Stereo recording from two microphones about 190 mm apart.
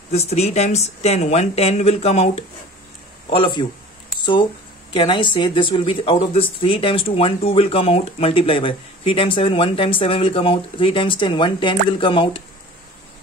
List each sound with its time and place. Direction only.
0.1 s speech: 35° left (ahead or behind)